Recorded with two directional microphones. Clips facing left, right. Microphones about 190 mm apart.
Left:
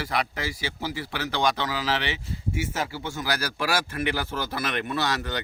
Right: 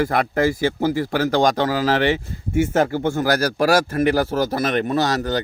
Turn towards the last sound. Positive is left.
turn(degrees=-40)  # may be behind; listen again after turning